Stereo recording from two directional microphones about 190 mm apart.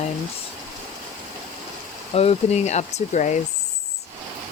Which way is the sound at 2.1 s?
35° left (ahead or behind).